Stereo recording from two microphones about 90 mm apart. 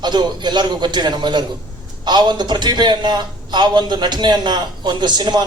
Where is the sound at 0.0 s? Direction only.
55° right (ahead or behind).